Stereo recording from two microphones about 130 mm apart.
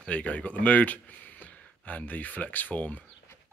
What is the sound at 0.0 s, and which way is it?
Speech, 10° left (ahead or behind).